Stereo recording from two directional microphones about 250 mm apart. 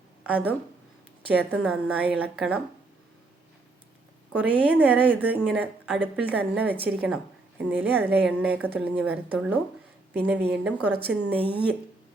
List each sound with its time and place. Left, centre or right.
0.3 s a woman's voice: centre
4.3 s a woman's voice: centre